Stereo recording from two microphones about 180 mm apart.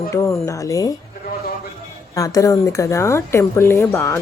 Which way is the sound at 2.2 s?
20° left (ahead or behind).